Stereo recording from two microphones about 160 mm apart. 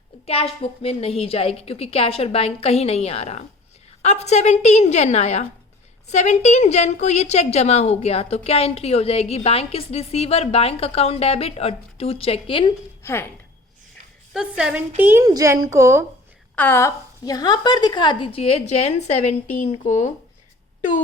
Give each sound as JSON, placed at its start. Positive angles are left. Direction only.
{"t": 0.3, "sound": "a woman's voice", "side_deg": 35}
{"t": 13.0, "sound": "speech", "side_deg": 15}
{"t": 14.3, "sound": "a woman's voice", "side_deg": -5}
{"t": 16.6, "sound": "a woman's voice", "side_deg": 15}